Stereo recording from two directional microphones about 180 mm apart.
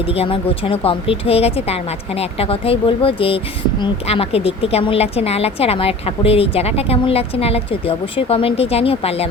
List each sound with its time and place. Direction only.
0.1 s speech: 30° left (ahead or behind)